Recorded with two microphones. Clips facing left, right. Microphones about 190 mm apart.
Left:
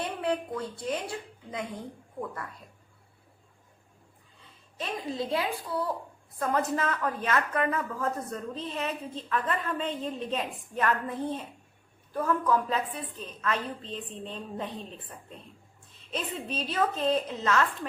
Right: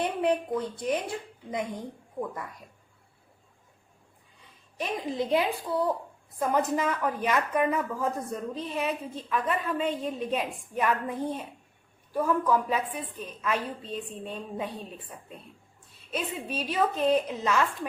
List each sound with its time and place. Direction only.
0.0 s speech: 20° right (ahead or behind)
4.8 s a child's voice: 15° right (ahead or behind)